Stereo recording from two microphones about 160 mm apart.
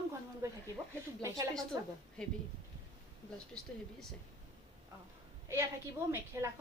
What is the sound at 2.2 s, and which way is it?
Speech, 5° left (ahead or behind).